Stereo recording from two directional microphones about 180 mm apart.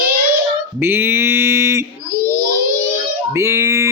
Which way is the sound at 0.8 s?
10° right (ahead or behind).